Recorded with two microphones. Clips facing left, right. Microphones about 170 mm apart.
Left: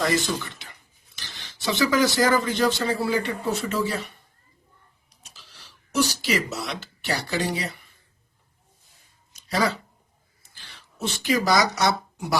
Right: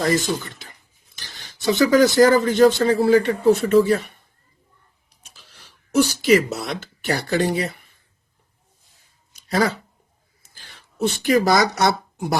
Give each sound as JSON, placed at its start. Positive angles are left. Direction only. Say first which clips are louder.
{"t": 0.0, "sound": "speech", "louder": "right 3 dB", "side_deg": -45}
{"t": 5.2, "sound": "a sound", "louder": "right 1 dB", "side_deg": -55}
{"t": 9.5, "sound": "speech", "louder": "right 4 dB", "side_deg": -50}